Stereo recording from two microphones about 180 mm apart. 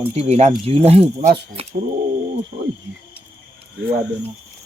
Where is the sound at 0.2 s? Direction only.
35° right (ahead or behind).